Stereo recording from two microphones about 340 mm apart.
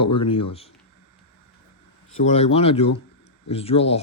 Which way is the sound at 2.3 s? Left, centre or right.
Centre.